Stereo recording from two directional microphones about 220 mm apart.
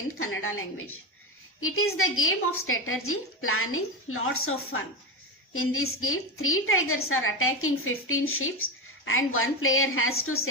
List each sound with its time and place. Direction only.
0.2 s a woman's voice: 70° left (ahead or behind)